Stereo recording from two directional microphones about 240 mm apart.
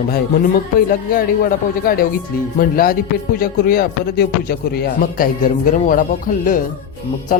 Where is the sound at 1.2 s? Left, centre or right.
Left.